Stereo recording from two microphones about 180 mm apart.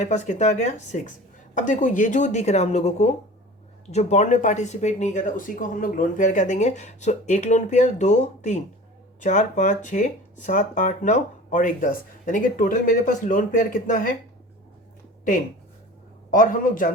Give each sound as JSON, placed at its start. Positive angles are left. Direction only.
{"t": 0.0, "sound": "speech", "side_deg": 40}
{"t": 16.3, "sound": "speech", "side_deg": 50}